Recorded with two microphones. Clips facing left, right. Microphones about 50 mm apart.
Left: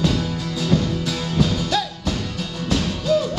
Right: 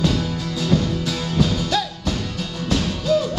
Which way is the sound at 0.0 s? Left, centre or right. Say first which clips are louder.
Even; left.